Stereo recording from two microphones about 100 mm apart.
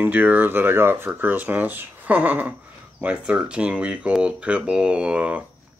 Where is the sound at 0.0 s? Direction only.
20° right (ahead or behind).